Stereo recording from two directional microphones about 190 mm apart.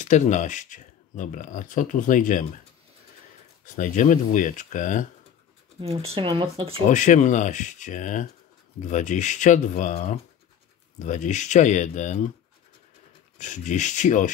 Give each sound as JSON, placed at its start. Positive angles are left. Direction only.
{"t": 0.0, "sound": "speech", "side_deg": 40}
{"t": 3.6, "sound": "speech", "side_deg": 40}
{"t": 5.8, "sound": "speech", "side_deg": -30}
{"t": 6.9, "sound": "speech", "side_deg": 40}
{"t": 13.4, "sound": "speech", "side_deg": 40}